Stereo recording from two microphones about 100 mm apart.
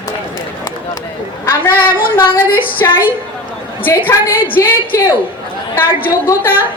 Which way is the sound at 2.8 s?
30° left (ahead or behind).